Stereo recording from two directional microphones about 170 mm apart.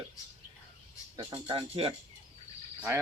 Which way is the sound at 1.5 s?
35° right (ahead or behind).